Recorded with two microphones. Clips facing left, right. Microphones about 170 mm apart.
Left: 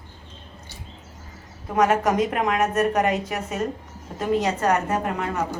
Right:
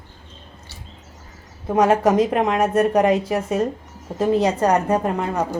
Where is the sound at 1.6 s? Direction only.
30° right (ahead or behind).